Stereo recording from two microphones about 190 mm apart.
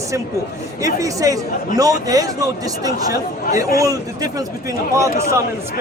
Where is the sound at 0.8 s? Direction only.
15° right (ahead or behind).